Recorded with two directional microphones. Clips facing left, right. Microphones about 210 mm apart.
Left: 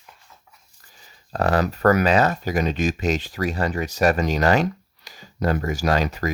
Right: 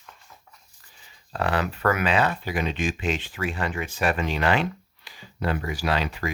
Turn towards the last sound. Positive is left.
turn(degrees=45)  # may be behind; listen again after turning